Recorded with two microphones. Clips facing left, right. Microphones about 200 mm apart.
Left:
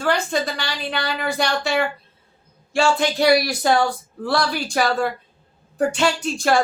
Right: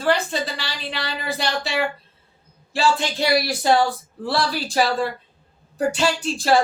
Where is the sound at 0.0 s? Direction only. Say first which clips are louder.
Even; 30° right (ahead or behind).